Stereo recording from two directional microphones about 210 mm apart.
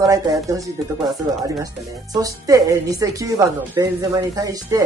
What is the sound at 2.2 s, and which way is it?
A woman's voice, 15° right (ahead or behind).